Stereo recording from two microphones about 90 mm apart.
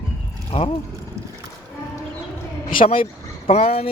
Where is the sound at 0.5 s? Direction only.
90° left.